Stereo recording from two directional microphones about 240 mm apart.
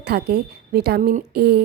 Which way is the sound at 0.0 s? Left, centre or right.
Right.